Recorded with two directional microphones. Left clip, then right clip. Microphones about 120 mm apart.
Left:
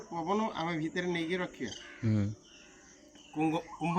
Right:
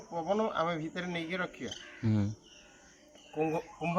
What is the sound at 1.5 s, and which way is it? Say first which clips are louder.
Speech: left 1 dB; 15° right (ahead or behind).